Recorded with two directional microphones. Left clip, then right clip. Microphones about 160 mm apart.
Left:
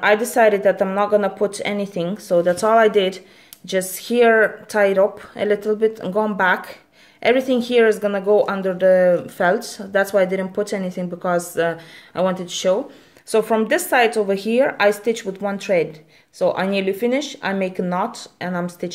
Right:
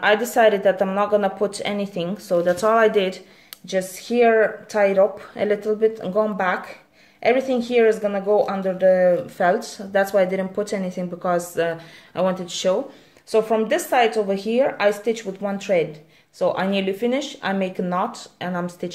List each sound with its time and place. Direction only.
0.0 s a woman's voice: 20° left (ahead or behind)
3.6 s speech: 30° left (ahead or behind); by 12.8 s 15° left (ahead or behind)
13.3 s speech: 30° left (ahead or behind)